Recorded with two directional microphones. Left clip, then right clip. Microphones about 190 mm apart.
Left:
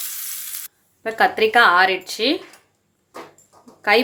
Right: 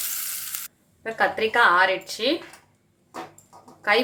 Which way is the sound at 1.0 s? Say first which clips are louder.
Left 6 dB; 40° left (ahead or behind).